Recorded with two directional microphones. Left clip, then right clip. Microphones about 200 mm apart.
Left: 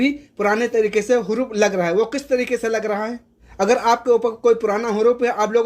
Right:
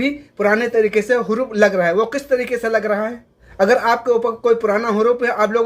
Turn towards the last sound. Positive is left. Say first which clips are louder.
# right 1 dB
turn(degrees=35)  # may be behind; listen again after turning